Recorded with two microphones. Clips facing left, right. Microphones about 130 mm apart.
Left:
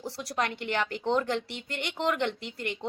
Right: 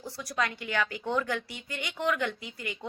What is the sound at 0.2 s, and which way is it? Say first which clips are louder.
Speech: even; 65° left (ahead or behind).